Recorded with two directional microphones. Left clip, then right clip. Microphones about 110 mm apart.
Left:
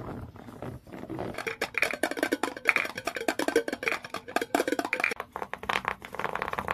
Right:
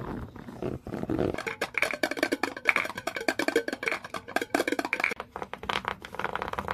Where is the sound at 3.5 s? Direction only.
30° right (ahead or behind).